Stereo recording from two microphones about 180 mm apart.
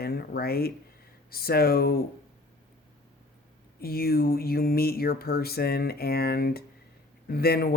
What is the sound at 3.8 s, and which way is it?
Speech, 55° left (ahead or behind).